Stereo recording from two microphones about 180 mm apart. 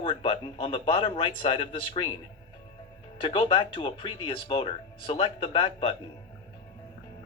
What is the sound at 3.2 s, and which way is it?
Speech, 30° left (ahead or behind).